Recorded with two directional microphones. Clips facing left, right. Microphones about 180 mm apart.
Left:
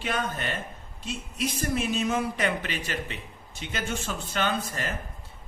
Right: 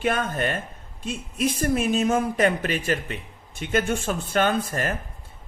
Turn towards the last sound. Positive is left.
turn(degrees=-50)  # may be behind; listen again after turning